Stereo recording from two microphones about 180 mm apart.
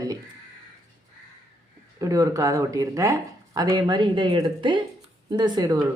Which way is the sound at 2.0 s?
20° right (ahead or behind).